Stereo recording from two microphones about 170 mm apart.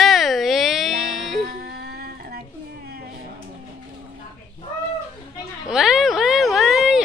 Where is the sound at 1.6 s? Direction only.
65° right (ahead or behind).